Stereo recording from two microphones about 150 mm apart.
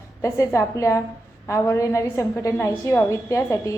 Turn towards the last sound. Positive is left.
turn(degrees=20)  # may be behind; listen again after turning